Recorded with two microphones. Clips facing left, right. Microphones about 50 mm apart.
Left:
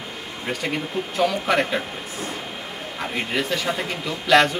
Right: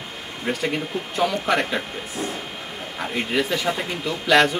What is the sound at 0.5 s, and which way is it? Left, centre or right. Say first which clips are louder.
A man's voice: right 2 dB; centre.